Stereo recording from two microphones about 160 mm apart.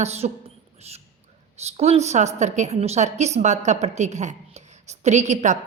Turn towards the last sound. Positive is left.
turn(degrees=-45)  # may be behind; listen again after turning